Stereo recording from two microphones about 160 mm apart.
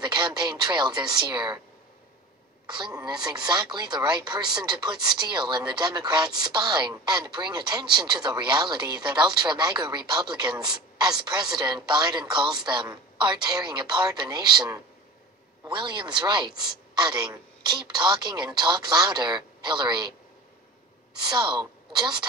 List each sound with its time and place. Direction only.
0.0 s speech: 30° right (ahead or behind)
2.6 s a woman's voice: 25° right (ahead or behind)
21.3 s a woman's voice: 30° right (ahead or behind)